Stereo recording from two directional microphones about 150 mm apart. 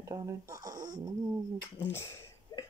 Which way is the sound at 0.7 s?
60° right (ahead or behind).